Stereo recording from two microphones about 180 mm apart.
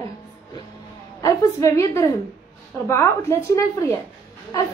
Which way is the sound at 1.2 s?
20° left (ahead or behind).